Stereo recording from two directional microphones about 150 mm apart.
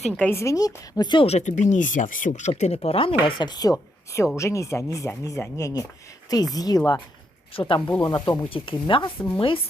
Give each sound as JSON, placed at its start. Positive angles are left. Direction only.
{"t": 0.2, "sound": "speech", "side_deg": 15}
{"t": 2.6, "sound": "speech", "side_deg": 45}